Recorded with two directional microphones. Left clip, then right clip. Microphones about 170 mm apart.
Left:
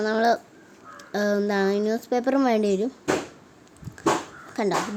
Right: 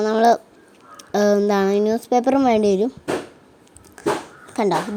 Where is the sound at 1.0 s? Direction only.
30° right (ahead or behind).